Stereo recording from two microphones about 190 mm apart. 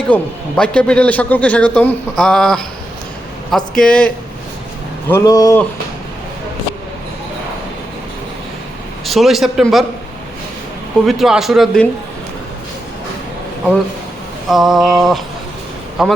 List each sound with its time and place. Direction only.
0.1 s a man's voice: 5° left (ahead or behind)
9.0 s a man's voice: centre (ahead or behind)
11.0 s a man's voice: centre (ahead or behind)
14.4 s a man's voice: centre (ahead or behind)